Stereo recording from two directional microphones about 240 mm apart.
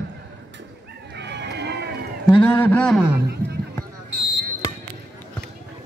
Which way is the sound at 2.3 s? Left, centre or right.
Centre.